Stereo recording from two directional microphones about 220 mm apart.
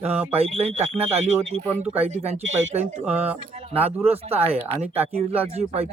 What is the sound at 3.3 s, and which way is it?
Speech, 30° right (ahead or behind).